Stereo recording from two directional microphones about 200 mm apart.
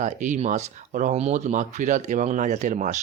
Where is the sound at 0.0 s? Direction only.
40° right (ahead or behind).